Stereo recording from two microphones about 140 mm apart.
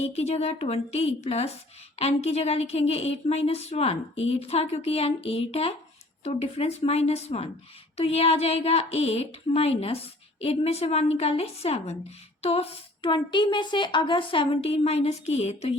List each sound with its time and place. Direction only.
0.0 s a woman's voice: 50° left (ahead or behind)